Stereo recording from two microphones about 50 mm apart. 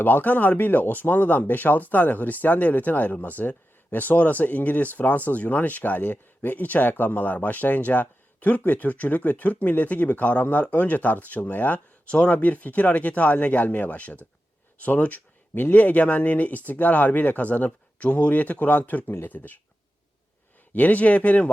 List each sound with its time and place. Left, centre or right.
0.0 s speech: left
20.7 s speech: left